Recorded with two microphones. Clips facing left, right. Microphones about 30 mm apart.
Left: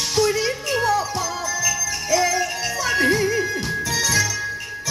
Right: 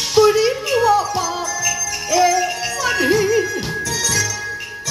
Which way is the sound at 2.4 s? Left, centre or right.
Centre.